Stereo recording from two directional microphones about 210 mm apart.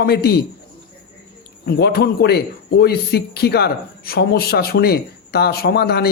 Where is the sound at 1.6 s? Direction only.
50° left (ahead or behind).